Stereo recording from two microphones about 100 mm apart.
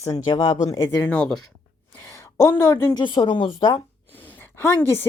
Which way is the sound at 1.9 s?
30° left (ahead or behind).